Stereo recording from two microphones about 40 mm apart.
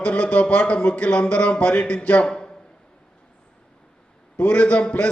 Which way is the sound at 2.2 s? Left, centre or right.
Left.